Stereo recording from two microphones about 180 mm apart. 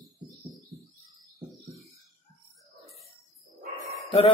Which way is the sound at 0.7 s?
Centre (ahead or behind).